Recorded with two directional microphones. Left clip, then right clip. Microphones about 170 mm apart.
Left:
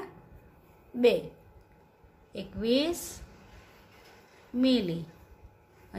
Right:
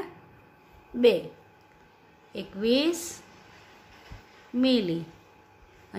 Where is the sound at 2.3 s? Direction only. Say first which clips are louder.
Right 3 dB; 20° right (ahead or behind).